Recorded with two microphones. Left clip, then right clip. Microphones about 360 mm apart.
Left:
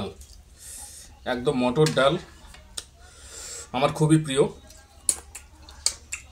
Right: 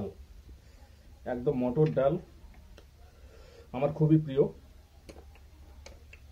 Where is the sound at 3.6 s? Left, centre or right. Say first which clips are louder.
Left 6 dB; right.